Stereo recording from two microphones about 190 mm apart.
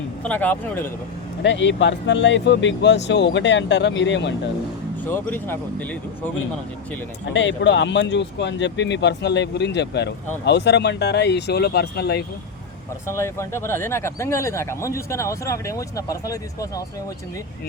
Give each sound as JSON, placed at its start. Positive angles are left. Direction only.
{"t": 0.3, "sound": "speech", "side_deg": 10}
{"t": 1.4, "sound": "speech", "side_deg": 70}
{"t": 5.0, "sound": "speech", "side_deg": 10}
{"t": 7.3, "sound": "speech", "side_deg": 70}
{"t": 13.1, "sound": "speech", "side_deg": 15}